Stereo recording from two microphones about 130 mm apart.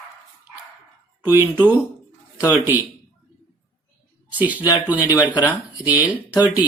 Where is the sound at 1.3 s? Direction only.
15° right (ahead or behind).